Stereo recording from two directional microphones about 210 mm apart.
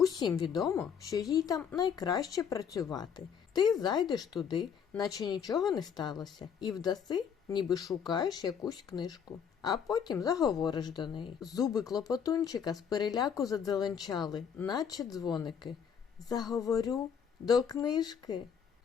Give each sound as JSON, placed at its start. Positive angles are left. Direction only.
{"t": 0.0, "sound": "a sound", "side_deg": 15}
{"t": 0.3, "sound": "speech", "side_deg": 20}
{"t": 16.6, "sound": "speech", "side_deg": 15}